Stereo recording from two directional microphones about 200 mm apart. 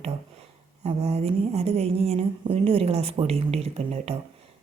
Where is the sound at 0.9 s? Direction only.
30° right (ahead or behind).